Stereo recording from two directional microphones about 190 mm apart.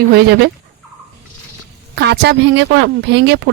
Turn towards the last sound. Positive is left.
turn(degrees=-65)  # may be behind; listen again after turning